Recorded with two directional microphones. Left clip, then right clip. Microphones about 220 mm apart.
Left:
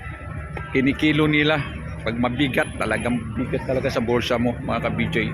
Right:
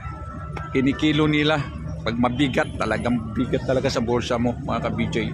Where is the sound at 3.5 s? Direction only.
15° right (ahead or behind).